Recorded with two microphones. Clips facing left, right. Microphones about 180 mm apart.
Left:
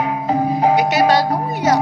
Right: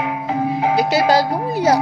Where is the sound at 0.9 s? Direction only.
30° right (ahead or behind).